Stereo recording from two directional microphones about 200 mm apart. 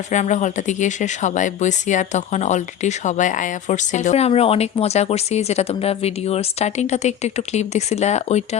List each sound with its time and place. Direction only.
0.1 s speech: 35° left (ahead or behind)